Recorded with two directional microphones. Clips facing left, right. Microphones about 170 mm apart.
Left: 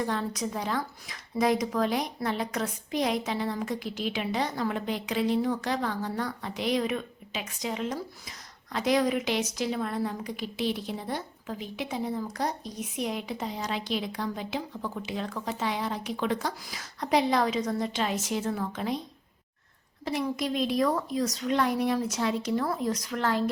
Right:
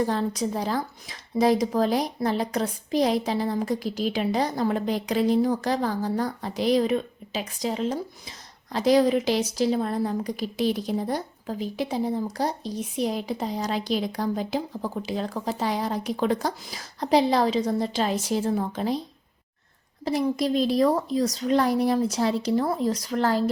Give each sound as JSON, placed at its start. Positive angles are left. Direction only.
{"t": 0.0, "sound": "speech", "side_deg": -35}
{"t": 20.1, "sound": "speech", "side_deg": -35}